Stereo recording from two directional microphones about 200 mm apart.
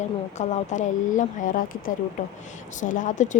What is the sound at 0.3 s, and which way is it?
A woman's voice, 35° left (ahead or behind).